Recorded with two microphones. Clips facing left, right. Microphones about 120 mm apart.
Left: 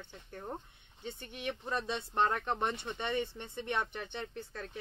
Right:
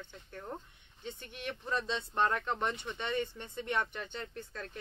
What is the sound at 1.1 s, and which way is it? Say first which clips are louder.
Speech: left 2 dB; 50° left (ahead or behind).